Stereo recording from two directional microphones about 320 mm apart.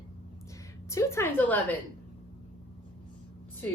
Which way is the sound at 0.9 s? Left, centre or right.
Centre.